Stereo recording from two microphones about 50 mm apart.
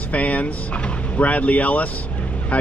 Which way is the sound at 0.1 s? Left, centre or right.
Left.